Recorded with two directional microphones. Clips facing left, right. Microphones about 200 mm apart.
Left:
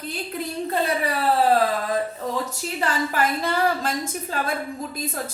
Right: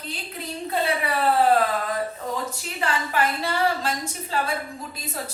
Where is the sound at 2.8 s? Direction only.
45° left (ahead or behind).